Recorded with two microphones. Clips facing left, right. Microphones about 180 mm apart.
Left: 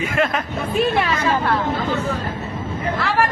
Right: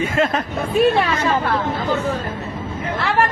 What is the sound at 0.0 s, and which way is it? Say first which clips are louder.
Speech: right 2 dB; 30° right (ahead or behind).